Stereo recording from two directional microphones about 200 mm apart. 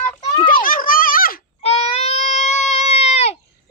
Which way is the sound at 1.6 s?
30° left (ahead or behind).